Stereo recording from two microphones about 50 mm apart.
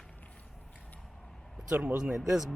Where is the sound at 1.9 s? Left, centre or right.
Centre.